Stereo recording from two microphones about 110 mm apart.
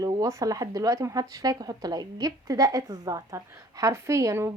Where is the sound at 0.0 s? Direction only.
30° right (ahead or behind).